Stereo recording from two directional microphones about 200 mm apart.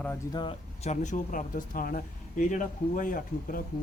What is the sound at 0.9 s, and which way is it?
Speech, 40° left (ahead or behind).